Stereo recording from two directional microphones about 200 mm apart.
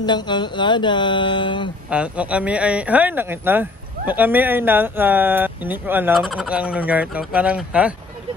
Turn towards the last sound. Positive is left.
turn(degrees=-5)  # may be behind; listen again after turning